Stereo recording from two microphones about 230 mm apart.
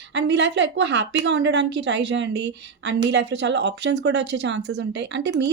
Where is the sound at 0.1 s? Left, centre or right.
Right.